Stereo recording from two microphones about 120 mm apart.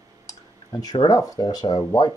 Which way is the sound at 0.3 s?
30° left (ahead or behind).